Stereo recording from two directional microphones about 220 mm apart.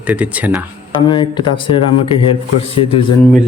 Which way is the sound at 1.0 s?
20° left (ahead or behind).